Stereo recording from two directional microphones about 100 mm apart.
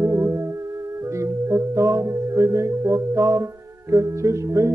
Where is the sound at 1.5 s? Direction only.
30° right (ahead or behind).